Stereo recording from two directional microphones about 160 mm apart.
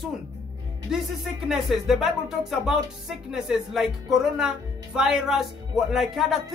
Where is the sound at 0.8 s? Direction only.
5° right (ahead or behind).